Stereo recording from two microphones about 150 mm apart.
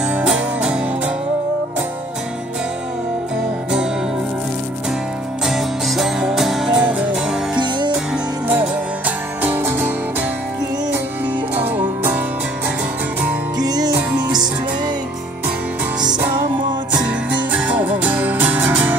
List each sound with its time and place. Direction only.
0.1 s music: 5° right (ahead or behind)
5.4 s music: centre (ahead or behind)
7.5 s music: 30° right (ahead or behind)
8.5 s music: 10° right (ahead or behind)
11.6 s music: 15° right (ahead or behind)
13.6 s music: 25° right (ahead or behind)
16.9 s music: 10° right (ahead or behind)